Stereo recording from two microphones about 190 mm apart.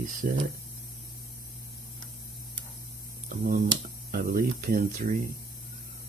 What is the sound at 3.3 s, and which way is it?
Speech, 50° right (ahead or behind).